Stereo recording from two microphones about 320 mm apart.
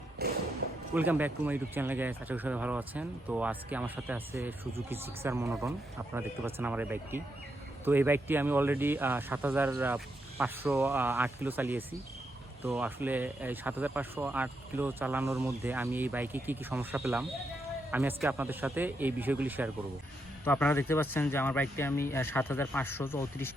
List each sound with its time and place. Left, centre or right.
0.2 s a sound: right
0.9 s speech: centre
20.4 s speech: centre